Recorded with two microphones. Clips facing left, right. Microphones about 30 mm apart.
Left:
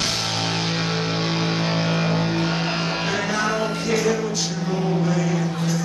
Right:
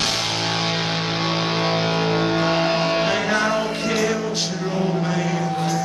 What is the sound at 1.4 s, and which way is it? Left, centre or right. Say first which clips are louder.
Music: right 2 dB; right.